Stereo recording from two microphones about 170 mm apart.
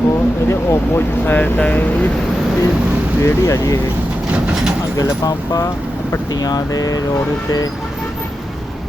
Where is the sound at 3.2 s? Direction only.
20° left (ahead or behind).